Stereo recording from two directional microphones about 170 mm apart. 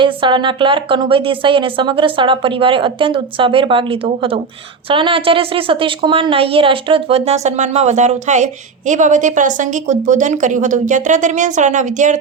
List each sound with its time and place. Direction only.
0.0 s a woman's voice: 30° right (ahead or behind); by 12.2 s 45° right (ahead or behind)